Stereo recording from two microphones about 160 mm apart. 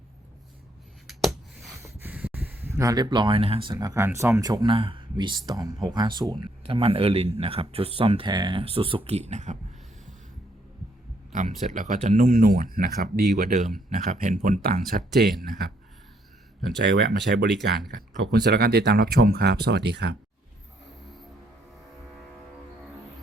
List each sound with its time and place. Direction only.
1.8 s speech: 15° right (ahead or behind); by 9.6 s 45° right (ahead or behind)
11.3 s a sound: 50° right (ahead or behind)
11.6 s speech: 55° right (ahead or behind); by 13.2 s 70° right (ahead or behind)
13.3 s speech: 50° right (ahead or behind)
14.6 s speech: 70° right (ahead or behind)
15.3 s speech: centre (ahead or behind)
16.8 s speech: 90° right